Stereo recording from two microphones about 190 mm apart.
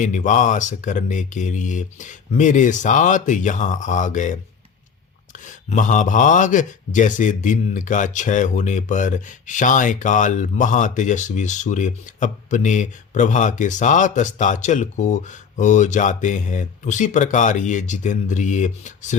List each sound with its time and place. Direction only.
0.0 s speech: 40° left (ahead or behind)
5.6 s speech: 40° left (ahead or behind)